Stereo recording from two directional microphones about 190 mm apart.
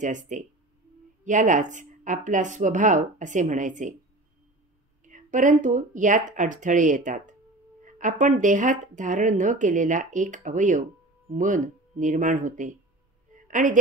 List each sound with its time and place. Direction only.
0.0 s speech: 40° right (ahead or behind)
5.0 s speech: 40° right (ahead or behind)
13.3 s a sound: 40° right (ahead or behind)